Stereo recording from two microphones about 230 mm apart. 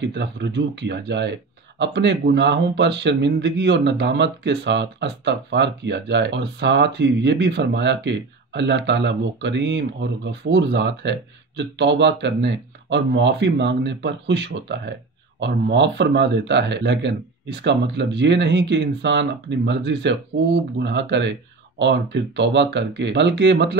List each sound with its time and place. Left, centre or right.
0.0 s speech: right